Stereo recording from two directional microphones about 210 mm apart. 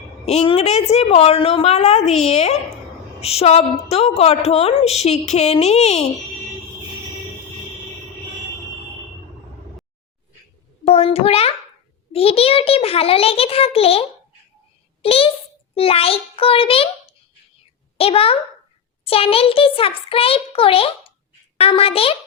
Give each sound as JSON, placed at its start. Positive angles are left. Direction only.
{"t": 0.3, "sound": "a woman's voice", "side_deg": 30}
{"t": 10.9, "sound": "a sound", "side_deg": 30}
{"t": 12.1, "sound": "a child's voice", "side_deg": 30}